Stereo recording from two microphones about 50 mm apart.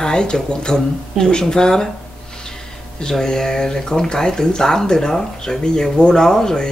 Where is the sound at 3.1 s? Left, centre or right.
Centre.